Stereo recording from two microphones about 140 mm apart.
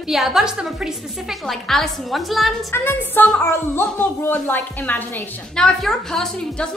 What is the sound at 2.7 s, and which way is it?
Speech, 15° left (ahead or behind).